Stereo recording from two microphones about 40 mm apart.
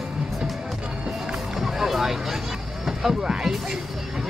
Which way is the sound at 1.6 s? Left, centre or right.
Centre.